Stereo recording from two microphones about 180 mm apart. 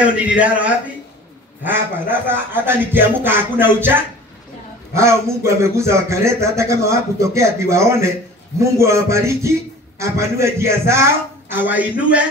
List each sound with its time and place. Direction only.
0.0 s speech: 5° right (ahead or behind)